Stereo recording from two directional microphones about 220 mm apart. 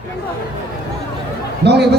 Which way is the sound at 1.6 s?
50° right (ahead or behind).